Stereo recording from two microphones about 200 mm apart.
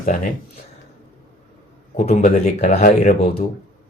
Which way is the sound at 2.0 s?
40° left (ahead or behind).